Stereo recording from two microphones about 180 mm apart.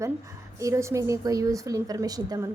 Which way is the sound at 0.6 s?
15° right (ahead or behind).